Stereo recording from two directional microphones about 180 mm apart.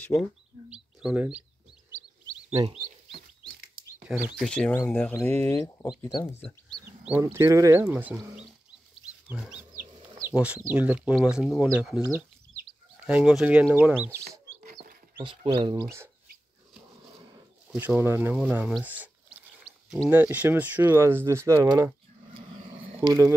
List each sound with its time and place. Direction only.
0.0 s speech: centre (ahead or behind)
2.5 s speech: 35° right (ahead or behind)
4.4 s speech: 5° left (ahead or behind); by 6.3 s 20° left (ahead or behind)
7.1 s speech: 15° right (ahead or behind)
10.1 s chicken: 10° right (ahead or behind)
10.6 s speech: 10° right (ahead or behind)
13.0 s speech: 5° right (ahead or behind)
14.6 s chicken: 60° right (ahead or behind)
15.1 s speech: 25° right (ahead or behind)
17.6 s speech: 10° right (ahead or behind)
23.0 s speech: 15° right (ahead or behind)